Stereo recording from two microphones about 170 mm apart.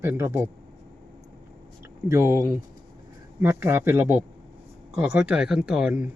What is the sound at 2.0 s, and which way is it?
Speech, 20° right (ahead or behind).